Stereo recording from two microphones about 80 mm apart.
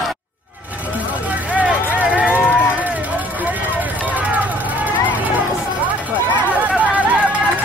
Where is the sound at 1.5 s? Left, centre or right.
Centre.